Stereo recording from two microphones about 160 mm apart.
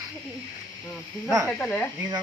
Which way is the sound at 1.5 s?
10° left (ahead or behind).